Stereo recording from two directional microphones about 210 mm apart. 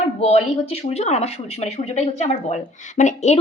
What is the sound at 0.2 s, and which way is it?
Speech, 30° left (ahead or behind).